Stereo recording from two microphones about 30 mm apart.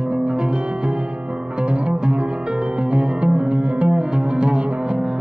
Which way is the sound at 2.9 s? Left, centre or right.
Right.